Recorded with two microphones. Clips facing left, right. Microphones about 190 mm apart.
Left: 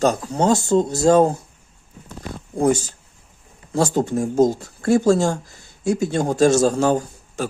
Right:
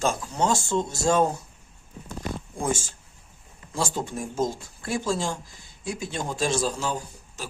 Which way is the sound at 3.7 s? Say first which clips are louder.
Left 10 dB; 45° left (ahead or behind).